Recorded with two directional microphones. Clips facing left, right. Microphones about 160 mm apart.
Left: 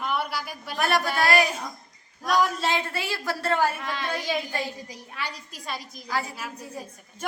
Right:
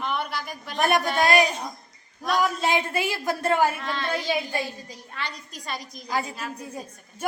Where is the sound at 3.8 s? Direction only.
10° left (ahead or behind).